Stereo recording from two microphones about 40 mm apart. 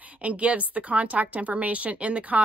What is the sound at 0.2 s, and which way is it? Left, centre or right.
A woman's voice, right.